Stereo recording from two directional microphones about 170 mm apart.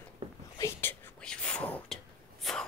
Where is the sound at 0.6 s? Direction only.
15° left (ahead or behind).